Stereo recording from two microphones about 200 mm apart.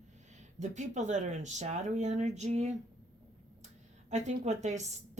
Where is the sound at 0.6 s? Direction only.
35° right (ahead or behind).